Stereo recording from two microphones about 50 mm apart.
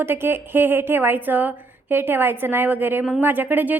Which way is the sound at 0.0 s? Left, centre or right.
Right.